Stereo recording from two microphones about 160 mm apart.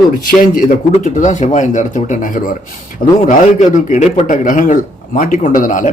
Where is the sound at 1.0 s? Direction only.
50° left (ahead or behind).